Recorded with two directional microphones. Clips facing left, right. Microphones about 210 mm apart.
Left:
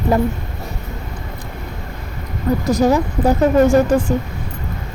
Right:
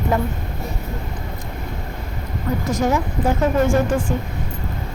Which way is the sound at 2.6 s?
35° left (ahead or behind).